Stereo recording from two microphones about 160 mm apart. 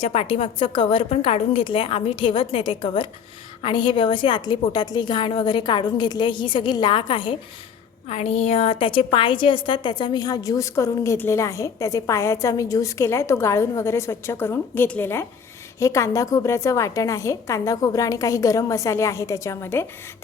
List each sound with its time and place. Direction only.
0.0 s a woman's voice: 40° left (ahead or behind)
8.1 s a woman's voice: 40° left (ahead or behind); by 19.9 s 15° left (ahead or behind)